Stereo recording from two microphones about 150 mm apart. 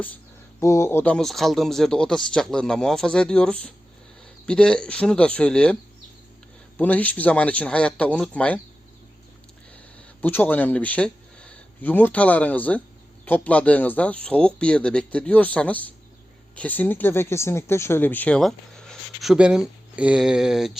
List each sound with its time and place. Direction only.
0.6 s speech: 20° left (ahead or behind)
1.1 s speech: centre (ahead or behind)
6.7 s speech: 10° left (ahead or behind)
10.2 s speech: 15° left (ahead or behind); by 20.7 s 5° right (ahead or behind)